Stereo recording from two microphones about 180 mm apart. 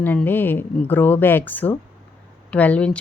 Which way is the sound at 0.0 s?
10° left (ahead or behind).